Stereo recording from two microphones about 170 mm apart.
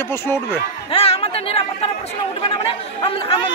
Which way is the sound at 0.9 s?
35° left (ahead or behind).